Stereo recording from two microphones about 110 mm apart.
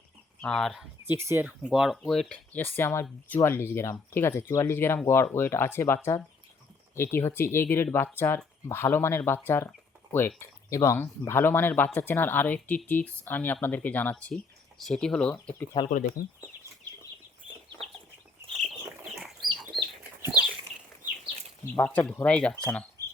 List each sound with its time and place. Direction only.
0.4 s speech: 5° left (ahead or behind)
1.0 s speech: 20° right (ahead or behind); by 2.6 s 5° left (ahead or behind)
2.6 s speech: 20° left (ahead or behind)
15.8 s speech: 40° left (ahead or behind)
19.4 s chicken: 45° right (ahead or behind)
20.2 s a sound: 15° right (ahead or behind)
21.8 s speech: 10° left (ahead or behind)